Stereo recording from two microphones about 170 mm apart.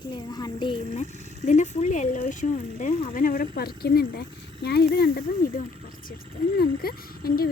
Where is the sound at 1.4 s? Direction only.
45° left (ahead or behind).